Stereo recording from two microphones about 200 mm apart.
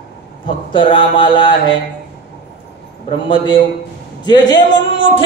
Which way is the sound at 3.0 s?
25° left (ahead or behind).